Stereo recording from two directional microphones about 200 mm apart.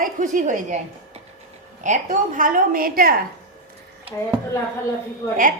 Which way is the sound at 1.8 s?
40° right (ahead or behind).